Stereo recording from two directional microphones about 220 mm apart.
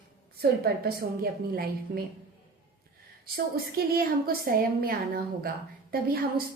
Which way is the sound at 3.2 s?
45° right (ahead or behind).